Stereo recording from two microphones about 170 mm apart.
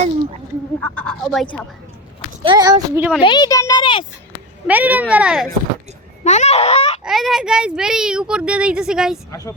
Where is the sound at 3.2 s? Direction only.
25° left (ahead or behind).